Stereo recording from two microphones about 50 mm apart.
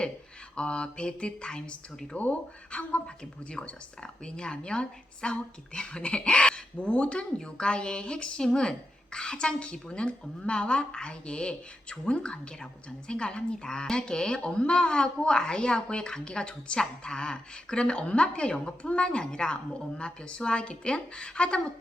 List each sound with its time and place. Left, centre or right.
0.5 s a woman's voice: centre